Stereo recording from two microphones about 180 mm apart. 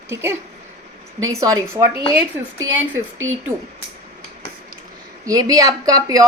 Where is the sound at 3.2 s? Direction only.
90° right.